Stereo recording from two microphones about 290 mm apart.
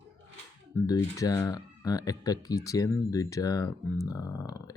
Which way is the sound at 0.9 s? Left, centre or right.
Centre.